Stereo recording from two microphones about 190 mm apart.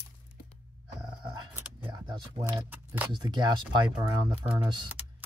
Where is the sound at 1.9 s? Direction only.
25° right (ahead or behind).